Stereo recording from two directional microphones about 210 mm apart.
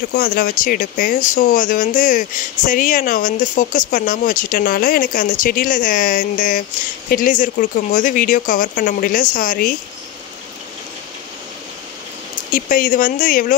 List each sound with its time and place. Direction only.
0.1 s speech: 45° left (ahead or behind)
12.5 s speech: 40° left (ahead or behind)